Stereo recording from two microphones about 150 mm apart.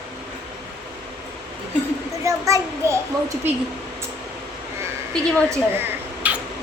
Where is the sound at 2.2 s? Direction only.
20° right (ahead or behind).